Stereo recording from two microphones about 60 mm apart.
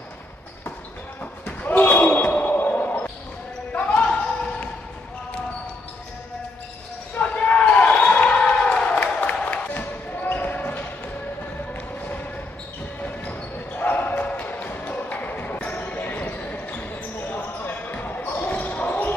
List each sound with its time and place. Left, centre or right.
1.2 s basketball bounce: left
3.7 s a sound: left
7.2 s basketball bounce: left
9.2 s music: left
9.8 s basketball bounce: left
13.0 s basketball bounce: left